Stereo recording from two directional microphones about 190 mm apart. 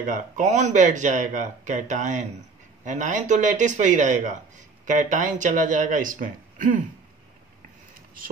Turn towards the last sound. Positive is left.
turn(degrees=-45)  # may be behind; listen again after turning